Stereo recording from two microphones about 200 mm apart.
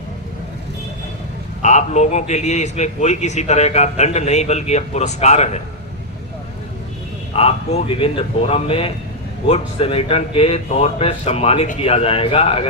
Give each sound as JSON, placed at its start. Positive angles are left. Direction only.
{"t": 1.6, "sound": "a man's voice", "side_deg": 35}
{"t": 7.3, "sound": "a man's voice", "side_deg": 30}